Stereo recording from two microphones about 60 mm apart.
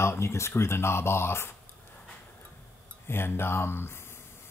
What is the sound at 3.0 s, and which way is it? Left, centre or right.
Speech, left.